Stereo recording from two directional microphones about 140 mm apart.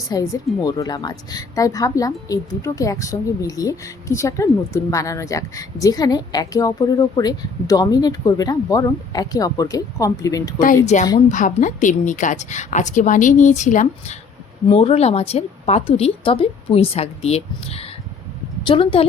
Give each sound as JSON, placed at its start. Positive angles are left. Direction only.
{"t": 0.1, "sound": "a woman's voice", "side_deg": 25}
{"t": 10.9, "sound": "a woman's voice", "side_deg": 60}
{"t": 14.7, "sound": "a woman's voice", "side_deg": 45}